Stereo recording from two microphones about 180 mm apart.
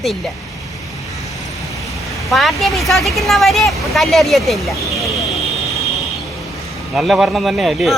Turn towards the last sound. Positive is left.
turn(degrees=0)  # may be behind; listen again after turning